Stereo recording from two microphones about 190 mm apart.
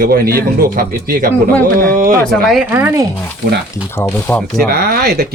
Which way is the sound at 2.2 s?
Centre (ahead or behind).